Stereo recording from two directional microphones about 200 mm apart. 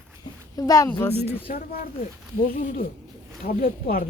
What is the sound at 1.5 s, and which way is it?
Speech, 40° left (ahead or behind).